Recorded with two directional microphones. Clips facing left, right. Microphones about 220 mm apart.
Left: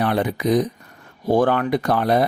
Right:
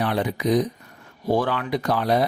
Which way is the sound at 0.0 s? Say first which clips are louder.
Left 3 dB; 55° left (ahead or behind).